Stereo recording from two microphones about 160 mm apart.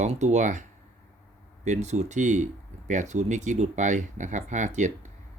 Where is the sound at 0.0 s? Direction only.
45° right (ahead or behind).